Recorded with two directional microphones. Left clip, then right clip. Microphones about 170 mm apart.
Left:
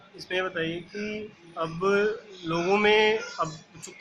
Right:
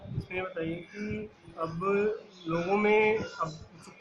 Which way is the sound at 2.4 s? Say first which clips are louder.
Left 4 dB; 25° left (ahead or behind).